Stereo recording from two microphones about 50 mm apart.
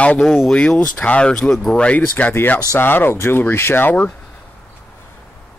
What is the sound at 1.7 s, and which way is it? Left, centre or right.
Speech, left.